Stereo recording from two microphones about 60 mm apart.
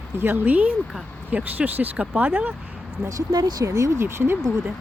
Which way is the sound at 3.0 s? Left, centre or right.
Right.